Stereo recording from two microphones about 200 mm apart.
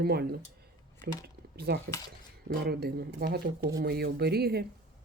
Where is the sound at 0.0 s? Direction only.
50° right (ahead or behind).